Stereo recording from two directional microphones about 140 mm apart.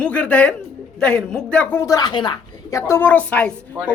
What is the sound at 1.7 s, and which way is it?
Speech, 25° left (ahead or behind).